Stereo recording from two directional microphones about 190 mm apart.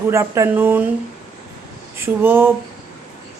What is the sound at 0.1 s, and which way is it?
Speech, 15° right (ahead or behind).